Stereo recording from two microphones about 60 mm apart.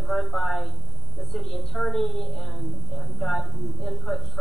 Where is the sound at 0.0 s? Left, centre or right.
Centre.